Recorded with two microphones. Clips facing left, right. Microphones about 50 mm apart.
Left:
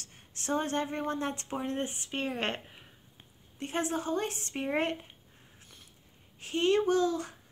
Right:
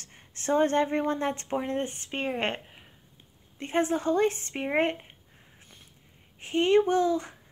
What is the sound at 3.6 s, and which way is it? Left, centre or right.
Speech, right.